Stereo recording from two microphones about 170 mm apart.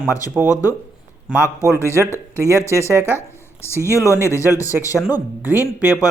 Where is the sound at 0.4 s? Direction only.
10° right (ahead or behind).